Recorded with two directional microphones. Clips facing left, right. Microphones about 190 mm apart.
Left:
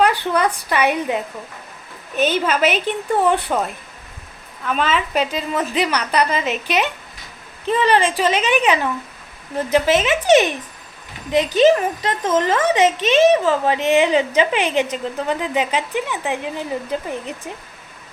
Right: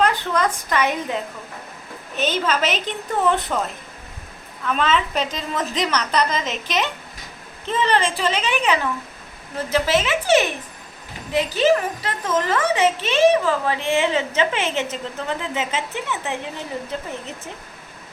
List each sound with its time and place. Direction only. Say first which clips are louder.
0.0 s a woman's voice: left 3 dB; 15° left (ahead or behind)
2.5 s speech: left 4 dB; 10° left (ahead or behind)
4.6 s speech: even; 5° left (ahead or behind)
11.5 s speech: left 4 dB; 20° left (ahead or behind)